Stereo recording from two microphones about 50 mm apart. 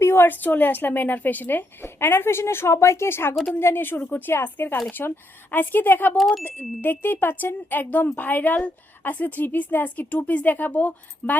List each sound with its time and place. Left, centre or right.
0.0 s a sound: left
0.3 s a woman's voice: left
2.0 s a woman's voice: left
6.1 s speech: centre
6.4 s a woman's voice: left